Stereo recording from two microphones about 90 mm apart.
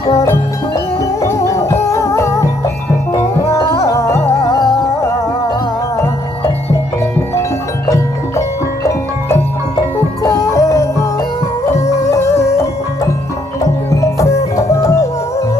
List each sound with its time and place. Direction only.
0.1 s music: 30° left (ahead or behind)
7.9 s music: 35° left (ahead or behind)